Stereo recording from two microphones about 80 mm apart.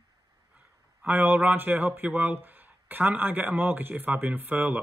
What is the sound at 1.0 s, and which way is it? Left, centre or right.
Speech, right.